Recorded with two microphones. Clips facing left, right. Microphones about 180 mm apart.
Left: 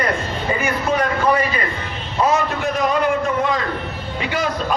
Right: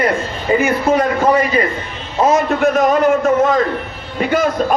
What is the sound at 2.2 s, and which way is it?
A man's voice, 45° right (ahead or behind).